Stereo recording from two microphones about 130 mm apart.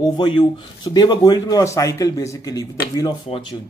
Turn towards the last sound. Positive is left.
turn(degrees=30)  # may be behind; listen again after turning